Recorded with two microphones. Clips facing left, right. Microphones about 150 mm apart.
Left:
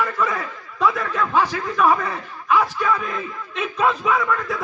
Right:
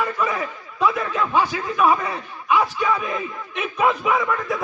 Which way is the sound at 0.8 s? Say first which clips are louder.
Even; 15° right (ahead or behind).